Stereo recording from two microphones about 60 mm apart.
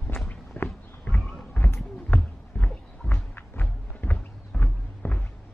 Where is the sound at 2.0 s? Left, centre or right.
Left.